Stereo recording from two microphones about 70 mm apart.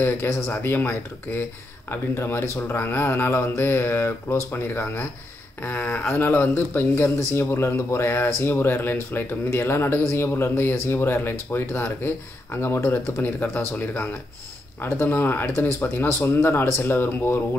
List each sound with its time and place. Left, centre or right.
0.0 s speech: left